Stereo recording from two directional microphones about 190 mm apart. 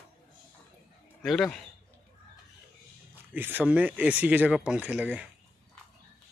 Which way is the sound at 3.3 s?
10° right (ahead or behind).